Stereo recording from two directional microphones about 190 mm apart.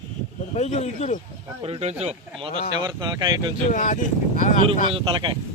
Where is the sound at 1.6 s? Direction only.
30° right (ahead or behind).